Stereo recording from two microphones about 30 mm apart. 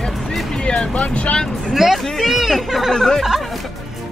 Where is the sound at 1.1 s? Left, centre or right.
Left.